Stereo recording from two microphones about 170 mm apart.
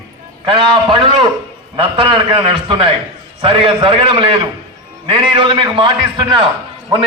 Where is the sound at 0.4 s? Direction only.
30° right (ahead or behind).